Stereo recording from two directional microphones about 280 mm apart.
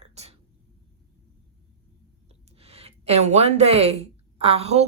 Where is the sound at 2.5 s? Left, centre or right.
Right.